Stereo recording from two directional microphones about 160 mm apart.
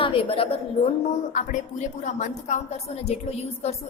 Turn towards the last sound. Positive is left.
turn(degrees=40)  # may be behind; listen again after turning